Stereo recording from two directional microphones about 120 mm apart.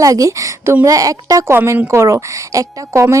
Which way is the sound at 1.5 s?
20° right (ahead or behind).